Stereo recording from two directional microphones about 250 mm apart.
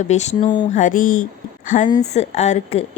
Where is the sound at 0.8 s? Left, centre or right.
Left.